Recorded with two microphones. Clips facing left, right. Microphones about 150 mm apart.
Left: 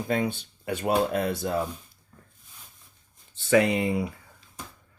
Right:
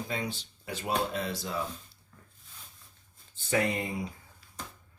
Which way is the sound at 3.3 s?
85° left.